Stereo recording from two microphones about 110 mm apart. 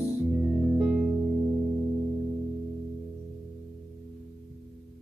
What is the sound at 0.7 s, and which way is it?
Music, 10° right (ahead or behind).